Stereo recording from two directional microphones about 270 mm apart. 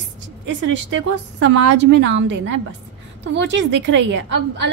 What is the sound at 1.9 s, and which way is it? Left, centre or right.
A woman's voice, right.